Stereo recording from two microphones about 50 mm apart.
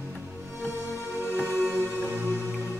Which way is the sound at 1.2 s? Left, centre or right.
Left.